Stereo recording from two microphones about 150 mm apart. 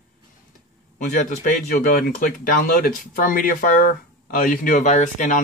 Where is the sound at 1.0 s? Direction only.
65° left (ahead or behind).